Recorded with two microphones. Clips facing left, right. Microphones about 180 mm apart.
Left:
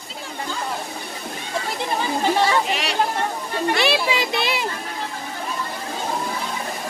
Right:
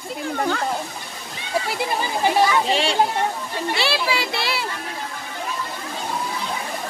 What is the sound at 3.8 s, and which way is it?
Speech, 20° left (ahead or behind).